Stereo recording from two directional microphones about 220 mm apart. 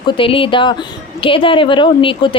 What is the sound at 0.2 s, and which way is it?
A woman's voice, 25° left (ahead or behind).